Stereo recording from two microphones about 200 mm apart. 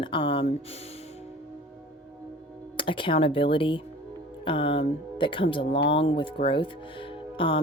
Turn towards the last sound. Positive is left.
turn(degrees=25)  # may be behind; listen again after turning